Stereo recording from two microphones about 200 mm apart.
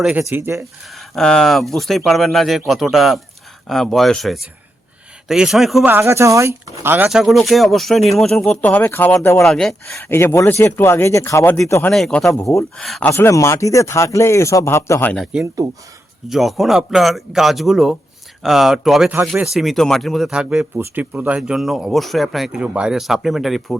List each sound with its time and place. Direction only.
0.0 s speech: 10° right (ahead or behind)
0.9 s speech: centre (ahead or behind)
13.1 s speech: 15° left (ahead or behind)
15.6 s speech: 15° right (ahead or behind)
16.3 s speech: centre (ahead or behind)